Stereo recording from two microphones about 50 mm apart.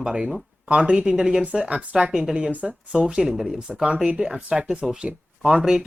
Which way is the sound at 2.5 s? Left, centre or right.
Right.